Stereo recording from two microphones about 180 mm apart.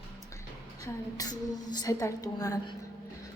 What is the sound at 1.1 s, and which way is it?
A woman's voice, 20° left (ahead or behind).